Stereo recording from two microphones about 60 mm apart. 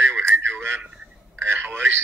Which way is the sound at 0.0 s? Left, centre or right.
Right.